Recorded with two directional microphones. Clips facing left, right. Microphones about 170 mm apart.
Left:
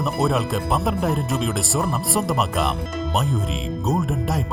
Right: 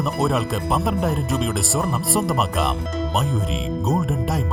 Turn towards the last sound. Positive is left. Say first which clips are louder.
# right 1 dB
turn(degrees=0)  # may be behind; listen again after turning